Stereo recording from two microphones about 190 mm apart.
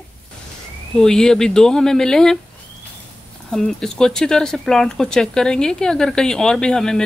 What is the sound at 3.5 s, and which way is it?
Speech, centre (ahead or behind).